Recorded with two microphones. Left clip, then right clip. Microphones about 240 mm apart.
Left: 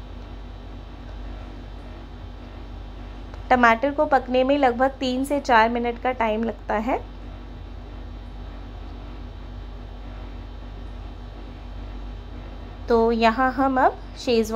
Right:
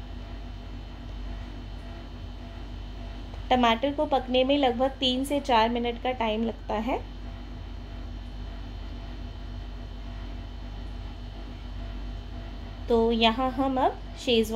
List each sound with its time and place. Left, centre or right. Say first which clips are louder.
3.4 s a woman's voice: left 6 dB; left
12.8 s a sound: left 5 dB; centre
13.3 s a woman's voice: left 6 dB; centre